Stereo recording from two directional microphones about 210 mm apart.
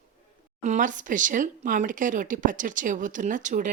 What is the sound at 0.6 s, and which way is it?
Speech, 35° right (ahead or behind).